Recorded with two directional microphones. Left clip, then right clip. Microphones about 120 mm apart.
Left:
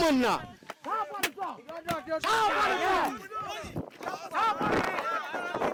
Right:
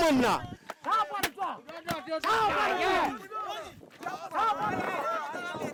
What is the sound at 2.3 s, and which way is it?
Speech, 30° left (ahead or behind).